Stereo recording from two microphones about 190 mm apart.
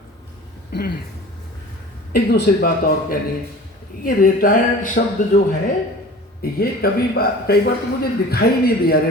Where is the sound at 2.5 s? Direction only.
50° left (ahead or behind).